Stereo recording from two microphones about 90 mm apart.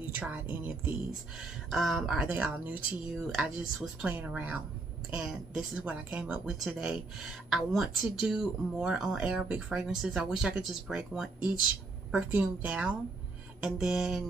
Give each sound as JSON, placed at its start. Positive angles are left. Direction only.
{"t": 0.2, "sound": "speech", "side_deg": -20}
{"t": 1.7, "sound": "speech", "side_deg": 0}
{"t": 2.2, "sound": "speech", "side_deg": -20}
{"t": 3.3, "sound": "speech", "side_deg": -5}
{"t": 4.0, "sound": "speech", "side_deg": -15}
{"t": 6.4, "sound": "speech", "side_deg": -5}